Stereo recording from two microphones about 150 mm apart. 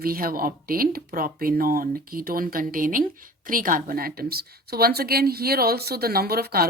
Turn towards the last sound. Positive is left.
turn(degrees=-90)